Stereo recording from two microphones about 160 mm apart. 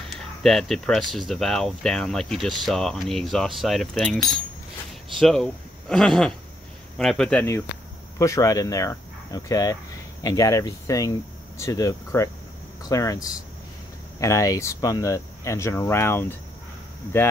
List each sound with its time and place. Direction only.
0.1 s speech: centre (ahead or behind)
8.2 s speech: 20° left (ahead or behind)